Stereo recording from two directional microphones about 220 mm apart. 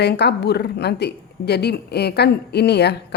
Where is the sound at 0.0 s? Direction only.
50° left (ahead or behind).